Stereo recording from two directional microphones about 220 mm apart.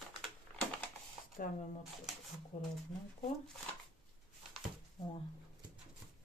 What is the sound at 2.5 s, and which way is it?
Speech, 30° left (ahead or behind).